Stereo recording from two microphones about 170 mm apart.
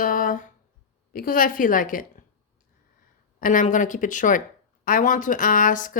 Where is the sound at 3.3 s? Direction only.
55° left (ahead or behind).